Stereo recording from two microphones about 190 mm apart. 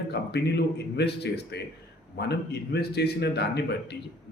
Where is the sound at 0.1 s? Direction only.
60° left (ahead or behind).